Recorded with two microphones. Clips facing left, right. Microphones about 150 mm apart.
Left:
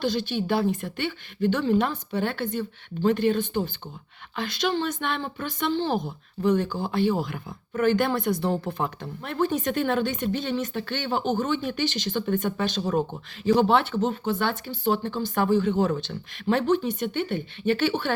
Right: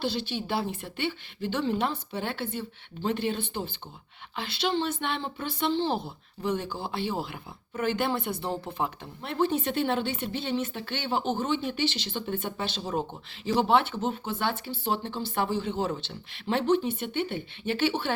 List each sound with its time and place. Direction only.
0.0 s a woman's voice: 30° right (ahead or behind)